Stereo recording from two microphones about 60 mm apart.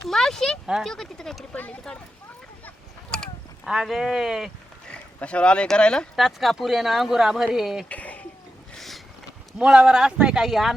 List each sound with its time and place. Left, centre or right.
0.1 s speech: centre
3.1 s mechanisms: centre
3.7 s speech: centre
4.9 s speech: centre
6.1 s speech: centre
7.9 s a sound: left
8.7 s a sound: centre
9.6 s speech: centre